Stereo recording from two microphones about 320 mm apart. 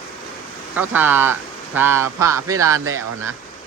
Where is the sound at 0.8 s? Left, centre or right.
Centre.